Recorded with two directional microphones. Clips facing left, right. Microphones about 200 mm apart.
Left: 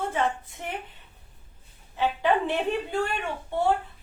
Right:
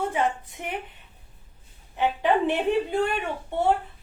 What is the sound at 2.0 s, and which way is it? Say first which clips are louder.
Speech: right 2 dB; 15° right (ahead or behind).